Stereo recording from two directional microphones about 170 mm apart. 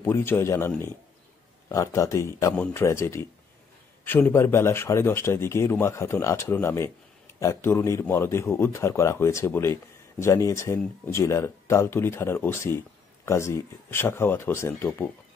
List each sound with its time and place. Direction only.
0.0 s a man's voice: 15° left (ahead or behind)